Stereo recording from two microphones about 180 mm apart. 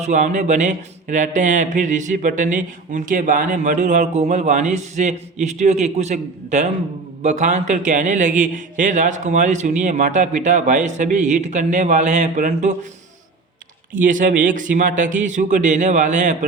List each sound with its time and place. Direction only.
0.0 s a man's voice: 40° right (ahead or behind)
13.9 s a man's voice: 45° right (ahead or behind)